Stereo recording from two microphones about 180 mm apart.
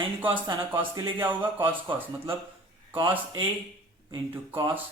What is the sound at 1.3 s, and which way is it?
Speech, 25° right (ahead or behind).